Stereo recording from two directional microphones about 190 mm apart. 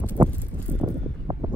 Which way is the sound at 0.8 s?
25° right (ahead or behind).